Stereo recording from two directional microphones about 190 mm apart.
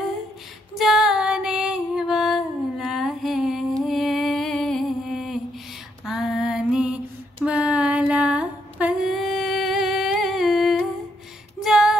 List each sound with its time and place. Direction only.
0.7 s music: centre (ahead or behind)
6.0 s female singing: centre (ahead or behind)
7.4 s a sound: 5° right (ahead or behind)
11.6 s female singing: centre (ahead or behind)